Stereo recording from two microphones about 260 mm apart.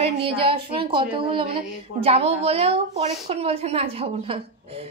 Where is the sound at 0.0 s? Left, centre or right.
Right.